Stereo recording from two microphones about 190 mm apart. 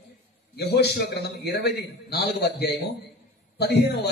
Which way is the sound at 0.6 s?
60° left (ahead or behind).